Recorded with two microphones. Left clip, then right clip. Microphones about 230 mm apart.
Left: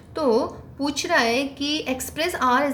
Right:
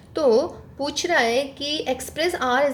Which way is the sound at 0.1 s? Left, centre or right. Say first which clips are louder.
Right 3 dB; right.